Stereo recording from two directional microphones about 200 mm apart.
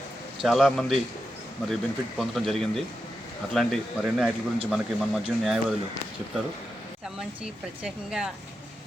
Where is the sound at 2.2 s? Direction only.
Centre (ahead or behind).